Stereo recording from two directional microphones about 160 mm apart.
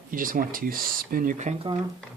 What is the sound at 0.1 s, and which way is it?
Speech, 60° right (ahead or behind).